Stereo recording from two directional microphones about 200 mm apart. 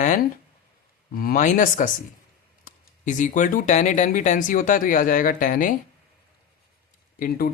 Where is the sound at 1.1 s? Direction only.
45° left (ahead or behind).